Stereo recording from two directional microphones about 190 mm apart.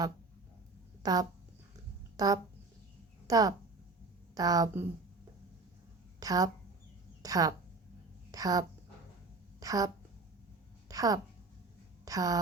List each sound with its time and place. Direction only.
1.0 s speech: 20° right (ahead or behind)
6.1 s a woman's voice: 20° right (ahead or behind)
10.8 s a sound: 20° right (ahead or behind)
12.0 s a woman's voice: 20° right (ahead or behind)